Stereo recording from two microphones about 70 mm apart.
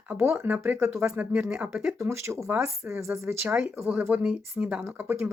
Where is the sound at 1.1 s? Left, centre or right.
Right.